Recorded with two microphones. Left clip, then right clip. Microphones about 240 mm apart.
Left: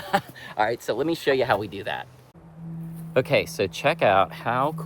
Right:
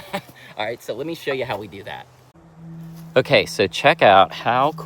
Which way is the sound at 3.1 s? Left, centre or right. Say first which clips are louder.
Right 5 dB; right.